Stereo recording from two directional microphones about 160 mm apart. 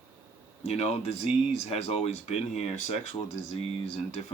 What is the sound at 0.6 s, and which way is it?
Speech, 40° left (ahead or behind).